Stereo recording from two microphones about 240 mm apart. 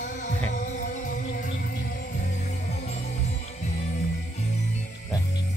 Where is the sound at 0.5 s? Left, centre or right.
Left.